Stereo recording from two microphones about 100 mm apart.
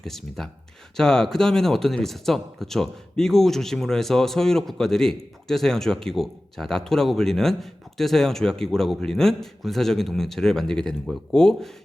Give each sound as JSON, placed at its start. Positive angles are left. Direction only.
{"t": 0.0, "sound": "speech", "side_deg": 5}